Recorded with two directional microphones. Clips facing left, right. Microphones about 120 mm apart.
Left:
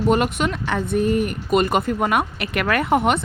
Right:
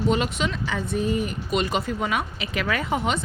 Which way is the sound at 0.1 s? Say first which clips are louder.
Left 5 dB; 55° left (ahead or behind).